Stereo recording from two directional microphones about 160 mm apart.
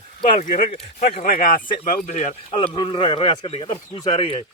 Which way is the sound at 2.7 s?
30° left (ahead or behind).